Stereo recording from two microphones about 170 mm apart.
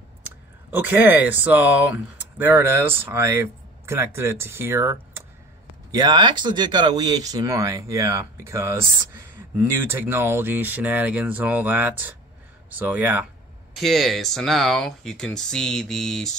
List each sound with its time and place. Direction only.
0.2 s speech: 10° right (ahead or behind)